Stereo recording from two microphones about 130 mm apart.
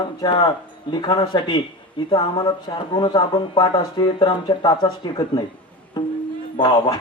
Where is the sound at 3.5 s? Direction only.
25° left (ahead or behind).